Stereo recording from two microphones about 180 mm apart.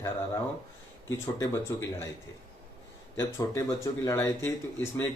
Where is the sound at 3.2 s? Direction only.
20° left (ahead or behind).